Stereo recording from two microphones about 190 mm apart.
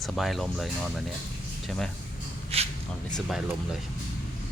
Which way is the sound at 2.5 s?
30° right (ahead or behind).